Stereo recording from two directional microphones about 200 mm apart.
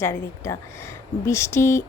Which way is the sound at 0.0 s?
15° left (ahead or behind).